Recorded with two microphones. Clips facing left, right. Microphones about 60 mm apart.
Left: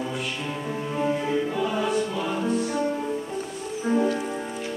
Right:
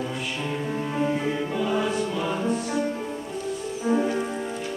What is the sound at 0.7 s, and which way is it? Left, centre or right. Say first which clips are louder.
Music: left 1 dB; centre.